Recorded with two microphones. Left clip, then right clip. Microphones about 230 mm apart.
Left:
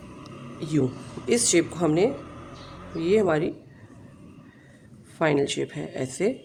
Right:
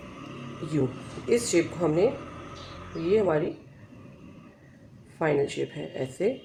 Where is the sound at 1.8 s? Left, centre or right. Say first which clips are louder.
Left 2 dB; left.